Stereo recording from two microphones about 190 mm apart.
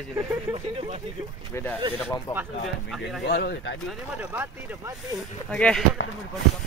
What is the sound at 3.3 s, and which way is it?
Speech, 55° left (ahead or behind).